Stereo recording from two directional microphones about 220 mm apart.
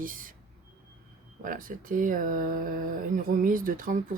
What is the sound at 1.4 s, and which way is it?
Speech, 40° right (ahead or behind).